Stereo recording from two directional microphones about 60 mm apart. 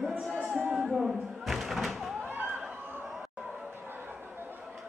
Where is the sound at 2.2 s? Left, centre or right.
Right.